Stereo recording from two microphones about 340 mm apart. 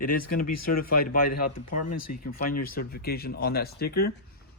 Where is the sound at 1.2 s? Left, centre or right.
Left.